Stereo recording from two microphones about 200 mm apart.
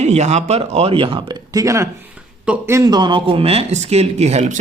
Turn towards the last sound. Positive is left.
turn(degrees=-35)  # may be behind; listen again after turning